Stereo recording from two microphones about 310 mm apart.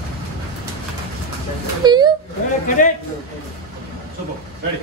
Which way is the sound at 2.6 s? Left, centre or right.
Left.